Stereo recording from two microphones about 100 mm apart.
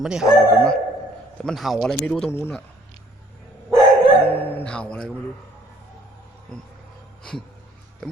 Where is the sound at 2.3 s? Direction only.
20° left (ahead or behind).